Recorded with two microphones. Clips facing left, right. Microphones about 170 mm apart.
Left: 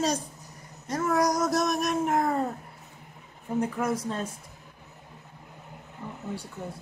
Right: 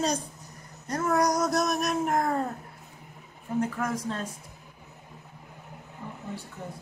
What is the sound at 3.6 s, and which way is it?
Speech, 15° left (ahead or behind).